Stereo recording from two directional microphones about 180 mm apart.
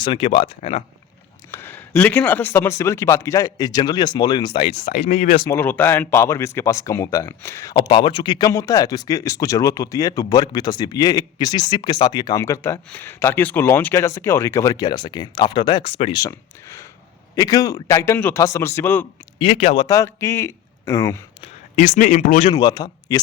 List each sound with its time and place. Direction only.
0.0 s speech: 30° left (ahead or behind)
1.5 s a man's voice: 10° left (ahead or behind); by 5.2 s 35° left (ahead or behind)
5.5 s a man's voice: 10° left (ahead or behind); by 16.1 s 35° left (ahead or behind)
16.1 s a man's voice: 15° left (ahead or behind)
19.4 s speech: 30° left (ahead or behind)
19.9 s a man's voice: 15° left (ahead or behind)
21.4 s speech: 40° left (ahead or behind)
22.5 s speech: 20° left (ahead or behind)